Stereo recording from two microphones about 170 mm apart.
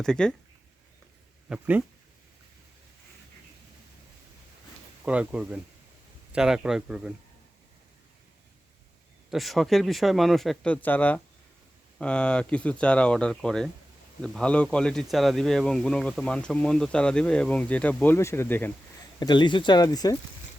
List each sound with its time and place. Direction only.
0.0 s speech: 5° left (ahead or behind)
1.5 s speech: 10° right (ahead or behind)
5.0 s speech: 10° right (ahead or behind)
9.3 s speech: centre (ahead or behind)
19.2 s speech: 25° left (ahead or behind)